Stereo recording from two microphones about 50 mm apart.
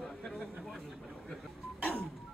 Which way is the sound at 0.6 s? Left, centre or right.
Centre.